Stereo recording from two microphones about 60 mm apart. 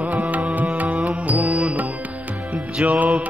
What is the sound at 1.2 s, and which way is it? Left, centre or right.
Music, right.